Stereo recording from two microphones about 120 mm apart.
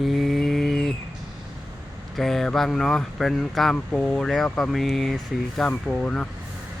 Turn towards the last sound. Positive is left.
turn(degrees=5)  # may be behind; listen again after turning